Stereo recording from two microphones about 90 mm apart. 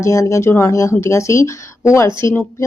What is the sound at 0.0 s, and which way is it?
Speech, 35° left (ahead or behind).